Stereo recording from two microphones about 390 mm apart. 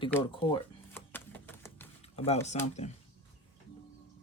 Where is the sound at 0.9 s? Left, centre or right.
Centre.